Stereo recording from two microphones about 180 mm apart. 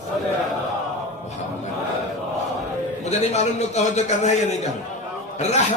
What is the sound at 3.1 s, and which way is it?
A man's voice, 40° left (ahead or behind).